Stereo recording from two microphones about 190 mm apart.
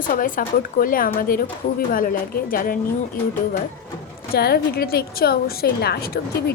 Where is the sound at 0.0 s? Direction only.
45° left (ahead or behind).